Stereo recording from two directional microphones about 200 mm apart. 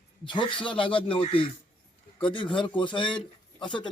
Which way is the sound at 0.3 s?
25° left (ahead or behind).